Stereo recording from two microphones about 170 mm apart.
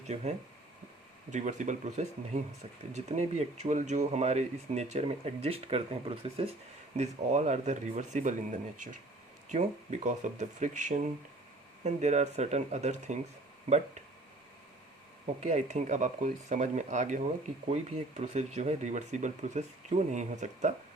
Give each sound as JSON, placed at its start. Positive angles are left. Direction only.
{"t": 1.3, "sound": "speech", "side_deg": -45}
{"t": 15.4, "sound": "speech", "side_deg": -45}